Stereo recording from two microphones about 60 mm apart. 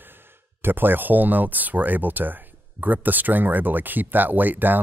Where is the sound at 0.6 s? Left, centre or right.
Right.